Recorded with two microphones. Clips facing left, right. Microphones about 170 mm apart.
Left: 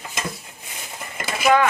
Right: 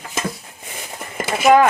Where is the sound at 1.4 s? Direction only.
40° right (ahead or behind).